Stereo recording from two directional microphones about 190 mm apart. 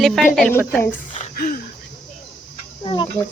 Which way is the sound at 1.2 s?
50° left (ahead or behind).